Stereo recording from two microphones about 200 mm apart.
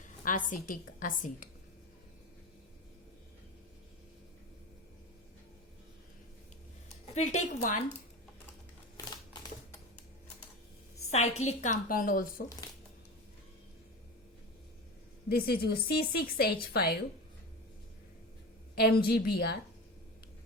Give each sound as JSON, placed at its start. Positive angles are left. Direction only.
{"t": 0.0, "sound": "a woman's voice", "side_deg": 40}
{"t": 7.1, "sound": "a woman's voice", "side_deg": 35}
{"t": 11.1, "sound": "a woman's voice", "side_deg": 35}
{"t": 15.3, "sound": "speech", "side_deg": 50}
{"t": 18.8, "sound": "speech", "side_deg": 50}